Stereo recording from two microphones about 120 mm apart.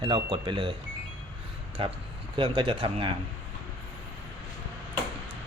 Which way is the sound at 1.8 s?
50° right (ahead or behind).